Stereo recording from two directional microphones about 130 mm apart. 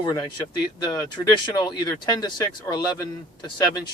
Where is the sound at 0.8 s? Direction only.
30° left (ahead or behind).